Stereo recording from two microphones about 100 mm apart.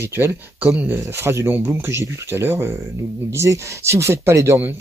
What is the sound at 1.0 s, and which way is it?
Speech, 30° right (ahead or behind).